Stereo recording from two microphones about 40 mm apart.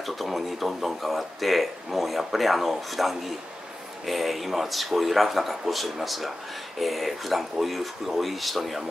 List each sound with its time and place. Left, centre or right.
0.0 s speech: centre